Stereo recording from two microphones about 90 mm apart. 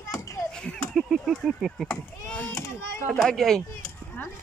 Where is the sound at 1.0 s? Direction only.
5° right (ahead or behind).